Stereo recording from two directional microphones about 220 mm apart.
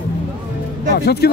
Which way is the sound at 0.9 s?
45° left (ahead or behind).